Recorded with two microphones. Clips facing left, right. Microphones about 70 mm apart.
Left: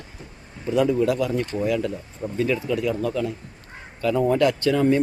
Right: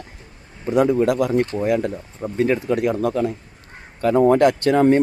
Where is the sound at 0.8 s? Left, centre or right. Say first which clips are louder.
Right 3 dB; right.